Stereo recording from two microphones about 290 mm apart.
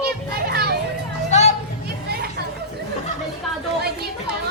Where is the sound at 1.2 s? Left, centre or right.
Left.